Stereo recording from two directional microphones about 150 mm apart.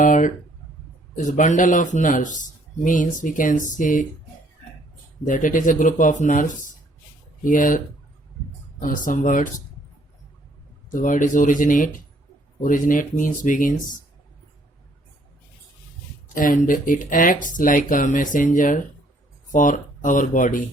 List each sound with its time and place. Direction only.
0.0 s a man's voice: 60° left (ahead or behind)
5.2 s a man's voice: 60° left (ahead or behind)
8.8 s a man's voice: 65° left (ahead or behind)
10.9 s a man's voice: 60° left (ahead or behind)
16.3 s a man's voice: 65° left (ahead or behind)